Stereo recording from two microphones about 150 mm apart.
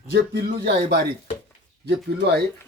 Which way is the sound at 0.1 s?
90° right.